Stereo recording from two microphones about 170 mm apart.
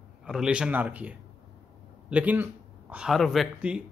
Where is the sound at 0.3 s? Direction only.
5° right (ahead or behind).